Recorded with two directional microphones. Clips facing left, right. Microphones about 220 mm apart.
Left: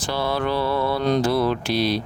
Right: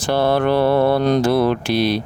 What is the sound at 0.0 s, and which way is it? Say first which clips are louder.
Speech: right 7 dB; 60° right (ahead or behind).